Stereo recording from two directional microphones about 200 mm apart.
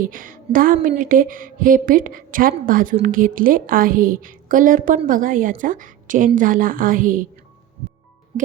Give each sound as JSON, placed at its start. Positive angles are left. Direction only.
{"t": 0.0, "sound": "a woman's voice", "side_deg": -45}